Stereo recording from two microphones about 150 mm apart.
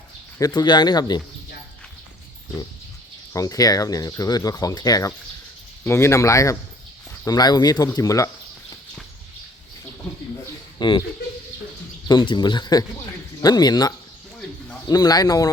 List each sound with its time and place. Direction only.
0.3 s speech: 25° left (ahead or behind)
3.3 s speech: 25° left (ahead or behind)
10.8 s speech: 30° left (ahead or behind)
12.0 s speech: 30° left (ahead or behind)